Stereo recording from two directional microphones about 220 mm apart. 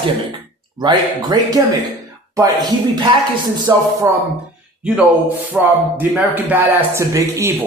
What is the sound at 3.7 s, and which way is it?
Speech, 15° right (ahead or behind).